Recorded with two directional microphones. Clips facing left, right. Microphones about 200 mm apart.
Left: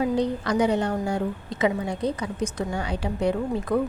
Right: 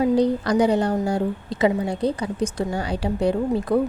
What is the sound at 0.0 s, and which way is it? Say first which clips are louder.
Speech: right 5 dB; 35° right (ahead or behind).